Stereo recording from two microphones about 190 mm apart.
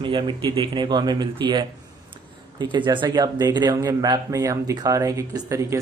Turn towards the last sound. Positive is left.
turn(degrees=-15)  # may be behind; listen again after turning